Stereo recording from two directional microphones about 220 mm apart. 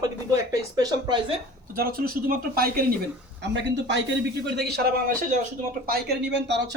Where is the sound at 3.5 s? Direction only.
55° right (ahead or behind).